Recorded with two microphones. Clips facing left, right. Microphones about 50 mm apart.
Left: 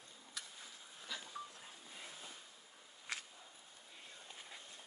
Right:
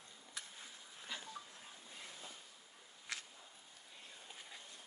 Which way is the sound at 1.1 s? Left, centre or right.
Right.